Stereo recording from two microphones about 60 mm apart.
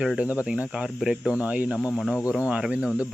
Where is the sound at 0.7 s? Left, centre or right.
Centre.